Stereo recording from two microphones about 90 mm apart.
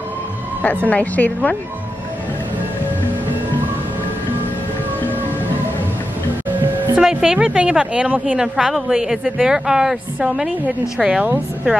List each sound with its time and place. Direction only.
0.8 s a woman's voice: 15° left (ahead or behind)
7.0 s a woman's voice: 5° right (ahead or behind)